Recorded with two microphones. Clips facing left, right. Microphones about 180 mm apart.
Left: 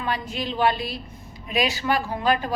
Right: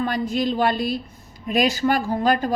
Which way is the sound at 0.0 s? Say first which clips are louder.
Right 6 dB; 45° right (ahead or behind).